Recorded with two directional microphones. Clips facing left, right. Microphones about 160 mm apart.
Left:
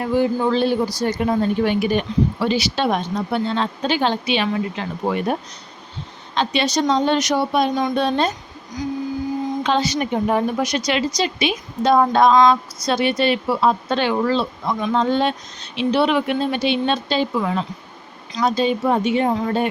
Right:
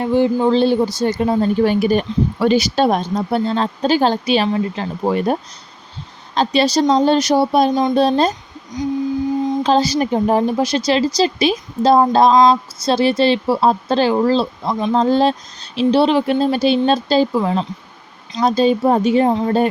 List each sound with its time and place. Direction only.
0.0 s a woman's voice: 25° right (ahead or behind)
8.7 s speech: 20° right (ahead or behind)
9.6 s a woman's voice: 35° right (ahead or behind)
19.3 s speech: 25° right (ahead or behind)